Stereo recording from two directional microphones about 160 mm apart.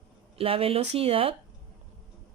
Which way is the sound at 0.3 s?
35° right (ahead or behind).